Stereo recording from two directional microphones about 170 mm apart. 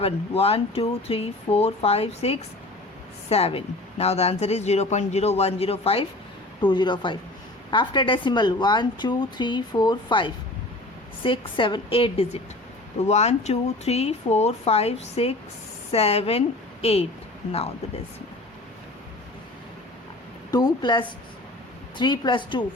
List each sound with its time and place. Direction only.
0.0 s a woman's voice: 35° left (ahead or behind)
20.5 s a woman's voice: 25° left (ahead or behind)